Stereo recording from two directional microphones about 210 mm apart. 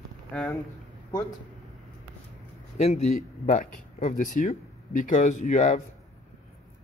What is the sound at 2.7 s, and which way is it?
Speech, 30° left (ahead or behind).